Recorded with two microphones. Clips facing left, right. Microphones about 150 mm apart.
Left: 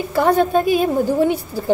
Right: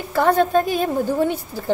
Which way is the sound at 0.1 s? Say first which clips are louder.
Left 1 dB; 15° left (ahead or behind).